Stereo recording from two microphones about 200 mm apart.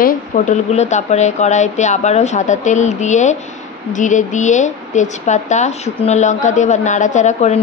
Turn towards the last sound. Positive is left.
turn(degrees=35)  # may be behind; listen again after turning